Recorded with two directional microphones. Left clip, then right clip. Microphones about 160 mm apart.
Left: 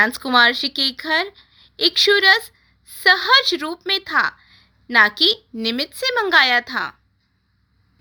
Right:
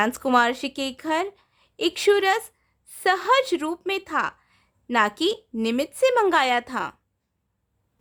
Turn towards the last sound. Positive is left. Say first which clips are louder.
# left 5 dB
turn(degrees=-35)  # may be behind; listen again after turning